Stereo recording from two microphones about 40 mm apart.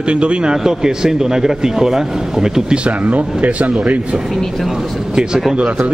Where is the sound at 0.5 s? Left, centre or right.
Centre.